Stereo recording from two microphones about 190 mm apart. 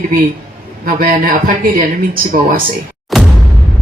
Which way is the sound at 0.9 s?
50° right (ahead or behind).